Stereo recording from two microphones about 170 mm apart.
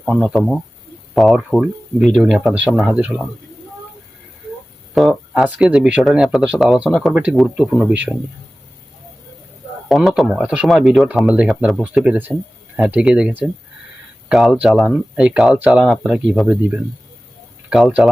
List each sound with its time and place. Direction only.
0.0 s speech: centre (ahead or behind)
4.9 s speech: centre (ahead or behind)
9.9 s speech: centre (ahead or behind)